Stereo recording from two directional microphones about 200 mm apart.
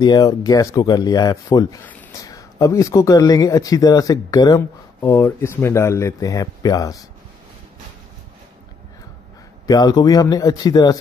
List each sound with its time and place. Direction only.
0.0 s speech: 20° left (ahead or behind)
9.7 s speech: 20° left (ahead or behind)